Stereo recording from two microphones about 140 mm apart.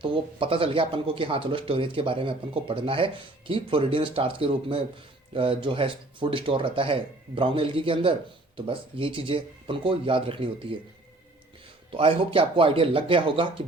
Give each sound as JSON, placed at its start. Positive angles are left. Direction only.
{"t": 0.0, "sound": "speech", "side_deg": -40}
{"t": 11.9, "sound": "speech", "side_deg": -40}